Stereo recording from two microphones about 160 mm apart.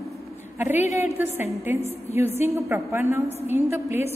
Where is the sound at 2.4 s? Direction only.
15° right (ahead or behind).